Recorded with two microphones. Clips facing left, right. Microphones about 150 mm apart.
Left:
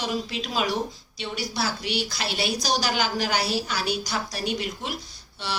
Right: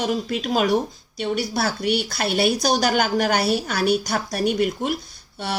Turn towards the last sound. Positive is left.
turn(degrees=-50)  # may be behind; listen again after turning